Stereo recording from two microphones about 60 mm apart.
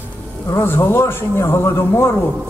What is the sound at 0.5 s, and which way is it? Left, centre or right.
A man's voice, left.